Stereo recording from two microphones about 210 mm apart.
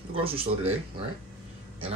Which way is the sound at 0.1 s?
25° right (ahead or behind).